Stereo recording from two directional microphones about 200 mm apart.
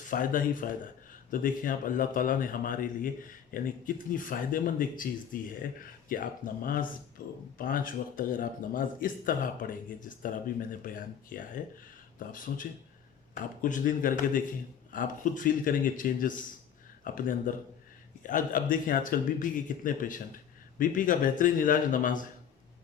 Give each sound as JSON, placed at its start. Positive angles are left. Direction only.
{"t": 0.1, "sound": "a man's voice", "side_deg": 45}